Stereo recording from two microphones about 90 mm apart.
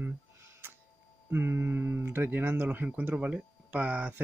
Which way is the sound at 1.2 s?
25° right (ahead or behind).